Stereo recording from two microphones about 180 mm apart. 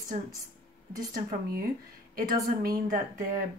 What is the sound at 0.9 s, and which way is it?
Speech, 55° right (ahead or behind).